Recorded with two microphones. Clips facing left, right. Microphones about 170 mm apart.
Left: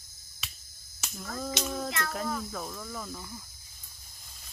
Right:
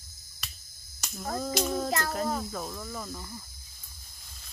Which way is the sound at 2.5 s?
5° right (ahead or behind).